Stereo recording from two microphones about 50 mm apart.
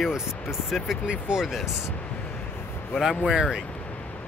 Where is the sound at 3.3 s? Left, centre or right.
Centre.